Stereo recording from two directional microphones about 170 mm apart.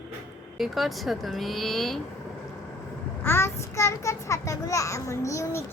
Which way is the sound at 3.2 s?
15° left (ahead or behind).